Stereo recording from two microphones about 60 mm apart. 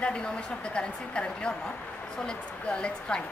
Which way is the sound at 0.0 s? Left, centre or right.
Centre.